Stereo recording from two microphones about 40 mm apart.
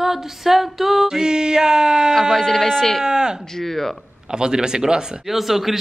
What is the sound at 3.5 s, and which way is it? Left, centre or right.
Speech, centre.